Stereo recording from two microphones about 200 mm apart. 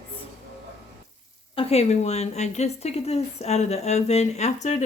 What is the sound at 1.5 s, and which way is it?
A woman's voice, 30° left (ahead or behind).